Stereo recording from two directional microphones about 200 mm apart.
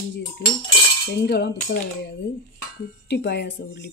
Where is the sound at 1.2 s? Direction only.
55° left (ahead or behind).